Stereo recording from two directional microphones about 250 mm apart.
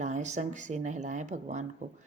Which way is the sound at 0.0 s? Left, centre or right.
Right.